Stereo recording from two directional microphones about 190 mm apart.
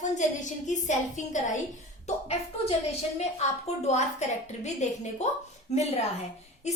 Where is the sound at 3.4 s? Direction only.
35° left (ahead or behind).